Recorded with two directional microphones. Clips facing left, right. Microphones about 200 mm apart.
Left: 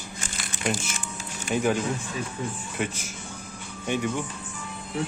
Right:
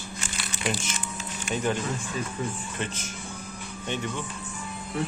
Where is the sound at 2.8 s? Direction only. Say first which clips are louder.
Left 5 dB; 10° left (ahead or behind).